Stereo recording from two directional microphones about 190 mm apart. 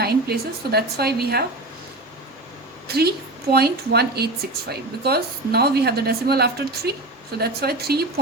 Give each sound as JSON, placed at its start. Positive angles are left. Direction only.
{"t": 0.0, "sound": "a woman's voice", "side_deg": -55}
{"t": 2.8, "sound": "a woman's voice", "side_deg": -55}